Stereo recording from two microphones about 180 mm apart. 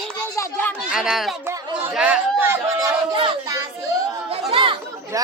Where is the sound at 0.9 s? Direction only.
Centre (ahead or behind).